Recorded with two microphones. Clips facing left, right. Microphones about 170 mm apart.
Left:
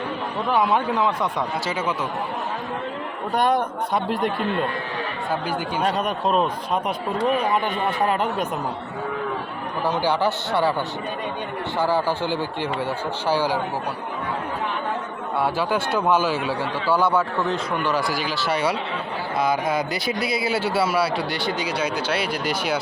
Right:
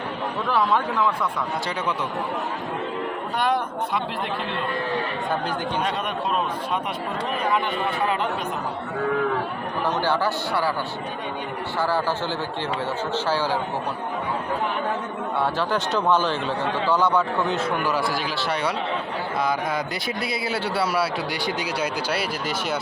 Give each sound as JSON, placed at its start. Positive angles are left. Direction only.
{"t": 0.4, "sound": "speech", "side_deg": 20}
{"t": 3.3, "sound": "speech", "side_deg": 45}
{"t": 5.8, "sound": "a man's voice", "side_deg": 40}
{"t": 7.5, "sound": "speech", "side_deg": 45}
{"t": 9.8, "sound": "a man's voice", "side_deg": 10}
{"t": 11.8, "sound": "a man's voice", "side_deg": 15}
{"t": 15.4, "sound": "a man's voice", "side_deg": 10}